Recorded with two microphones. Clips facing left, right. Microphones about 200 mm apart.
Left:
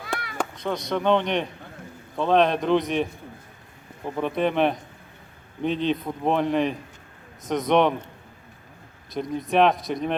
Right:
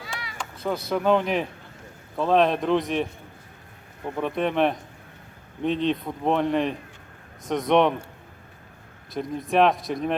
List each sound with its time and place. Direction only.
0.0 s cat: 55° left (ahead or behind)
0.5 s speech: 5° right (ahead or behind)
9.1 s speech: centre (ahead or behind)